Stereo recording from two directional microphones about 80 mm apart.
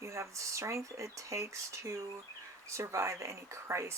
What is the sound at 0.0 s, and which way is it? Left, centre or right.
Speech, right.